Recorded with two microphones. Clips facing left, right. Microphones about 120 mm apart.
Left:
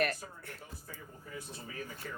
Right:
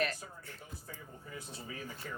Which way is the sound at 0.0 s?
55° left (ahead or behind).